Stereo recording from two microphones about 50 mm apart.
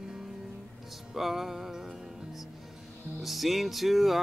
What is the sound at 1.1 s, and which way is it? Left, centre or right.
Music, centre.